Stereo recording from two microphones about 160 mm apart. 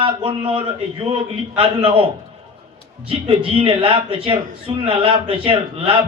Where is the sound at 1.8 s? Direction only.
35° right (ahead or behind).